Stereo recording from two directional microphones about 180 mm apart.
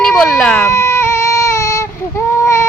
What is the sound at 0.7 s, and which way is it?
Baby cry, 15° left (ahead or behind).